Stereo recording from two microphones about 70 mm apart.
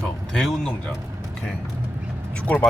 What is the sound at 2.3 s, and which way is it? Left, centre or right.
Speech, centre.